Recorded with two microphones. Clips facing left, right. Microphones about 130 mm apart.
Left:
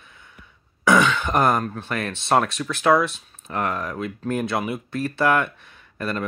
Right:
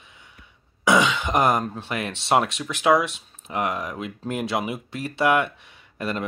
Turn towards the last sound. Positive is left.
turn(degrees=-15)  # may be behind; listen again after turning